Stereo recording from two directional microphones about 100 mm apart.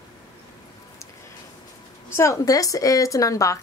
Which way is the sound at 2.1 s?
35° left (ahead or behind).